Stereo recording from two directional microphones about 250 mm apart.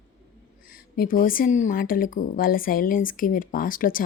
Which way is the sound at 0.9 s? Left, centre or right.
Left.